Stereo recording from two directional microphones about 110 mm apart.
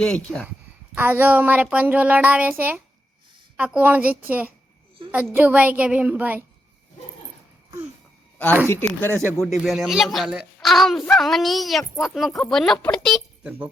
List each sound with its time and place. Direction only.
0.0 s speech: 5° left (ahead or behind)
0.9 s a woman's voice: 20° right (ahead or behind)
8.7 s speech: 20° left (ahead or behind)
9.1 s speech: centre (ahead or behind)